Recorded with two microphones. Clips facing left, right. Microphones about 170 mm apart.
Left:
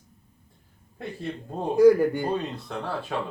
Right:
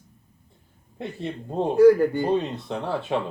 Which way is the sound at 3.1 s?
20° right (ahead or behind).